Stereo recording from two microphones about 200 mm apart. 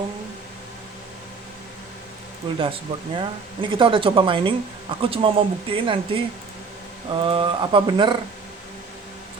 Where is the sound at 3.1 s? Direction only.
25° right (ahead or behind).